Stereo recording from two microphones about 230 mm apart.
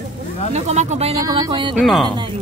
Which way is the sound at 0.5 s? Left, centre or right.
Right.